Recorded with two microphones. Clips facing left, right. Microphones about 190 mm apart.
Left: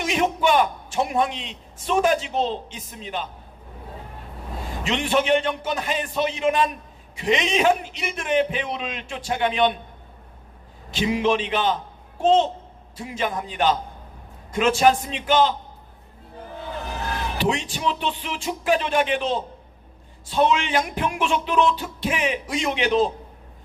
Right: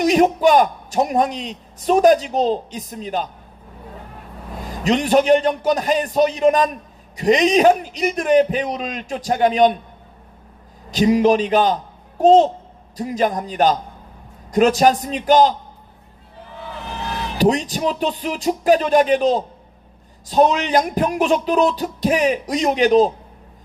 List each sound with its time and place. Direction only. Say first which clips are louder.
0.0 s a man's voice: right 8 dB; 40° right (ahead or behind)
4.7 s a man's voice: right 7 dB; 40° right (ahead or behind)
10.9 s a man's voice: right 7 dB; 40° right (ahead or behind)
17.3 s a man's voice: right 9 dB; 40° right (ahead or behind)